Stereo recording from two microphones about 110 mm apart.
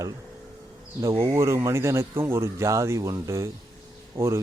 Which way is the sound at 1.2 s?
25° right (ahead or behind).